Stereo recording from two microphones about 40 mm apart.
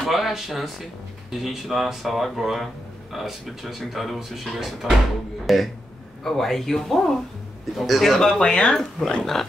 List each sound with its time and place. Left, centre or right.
0.0 s speech: centre
8.4 s speech: centre